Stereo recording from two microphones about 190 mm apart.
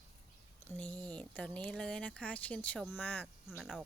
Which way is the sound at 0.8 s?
5° left (ahead or behind).